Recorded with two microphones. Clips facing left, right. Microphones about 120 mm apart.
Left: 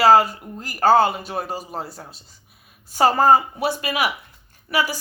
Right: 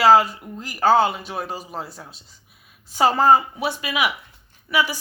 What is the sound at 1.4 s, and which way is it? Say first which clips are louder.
Speech: left 2 dB; 5° left (ahead or behind).